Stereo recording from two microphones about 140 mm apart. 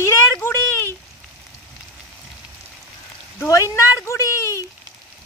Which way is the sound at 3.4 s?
20° left (ahead or behind).